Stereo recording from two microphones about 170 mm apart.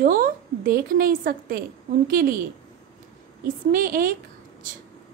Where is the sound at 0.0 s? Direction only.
55° right (ahead or behind).